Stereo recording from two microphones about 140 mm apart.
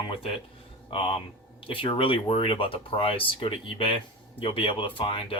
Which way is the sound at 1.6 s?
40° left (ahead or behind).